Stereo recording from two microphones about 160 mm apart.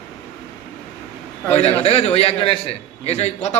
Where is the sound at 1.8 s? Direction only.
40° left (ahead or behind).